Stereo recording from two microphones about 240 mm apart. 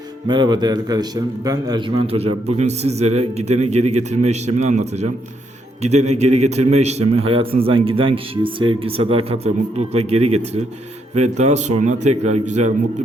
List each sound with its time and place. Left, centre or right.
0.3 s a man's voice: centre
5.8 s a man's voice: right